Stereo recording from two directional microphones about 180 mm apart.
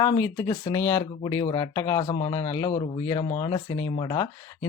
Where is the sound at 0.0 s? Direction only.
20° left (ahead or behind).